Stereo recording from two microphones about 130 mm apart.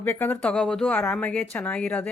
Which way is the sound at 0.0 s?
15° left (ahead or behind).